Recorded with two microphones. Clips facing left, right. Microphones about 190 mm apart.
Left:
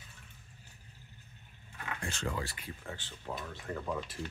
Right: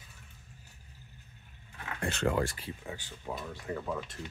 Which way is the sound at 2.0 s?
60° right (ahead or behind).